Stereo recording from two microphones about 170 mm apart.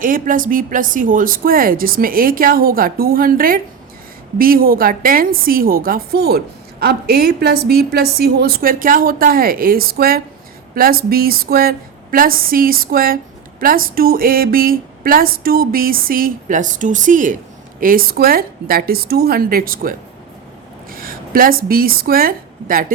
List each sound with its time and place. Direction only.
0.0 s a woman's voice: 55° right (ahead or behind)